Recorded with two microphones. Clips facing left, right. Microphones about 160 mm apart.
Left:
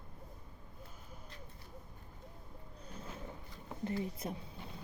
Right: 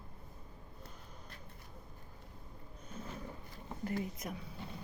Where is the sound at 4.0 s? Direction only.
30° left (ahead or behind).